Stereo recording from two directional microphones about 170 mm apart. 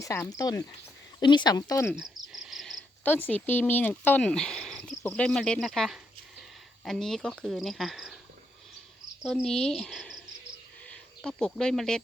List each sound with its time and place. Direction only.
0.0 s speech: 20° left (ahead or behind)
2.0 s cricket: 5° right (ahead or behind)
6.8 s speech: centre (ahead or behind)
9.2 s speech: 5° left (ahead or behind)